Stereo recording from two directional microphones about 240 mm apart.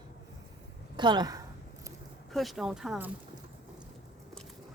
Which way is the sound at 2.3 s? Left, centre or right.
Centre.